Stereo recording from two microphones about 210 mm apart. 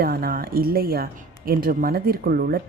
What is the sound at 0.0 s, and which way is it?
Speech, 45° right (ahead or behind).